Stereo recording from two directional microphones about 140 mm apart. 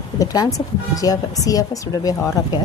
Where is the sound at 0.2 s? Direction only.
25° left (ahead or behind).